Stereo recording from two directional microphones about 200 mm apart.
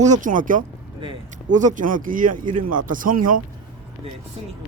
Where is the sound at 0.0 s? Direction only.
40° right (ahead or behind).